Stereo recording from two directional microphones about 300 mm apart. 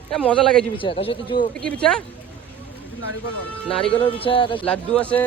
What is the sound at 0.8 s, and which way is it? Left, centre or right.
Speech, centre.